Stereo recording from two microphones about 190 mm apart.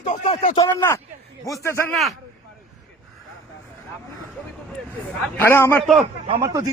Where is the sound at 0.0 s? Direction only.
40° left (ahead or behind).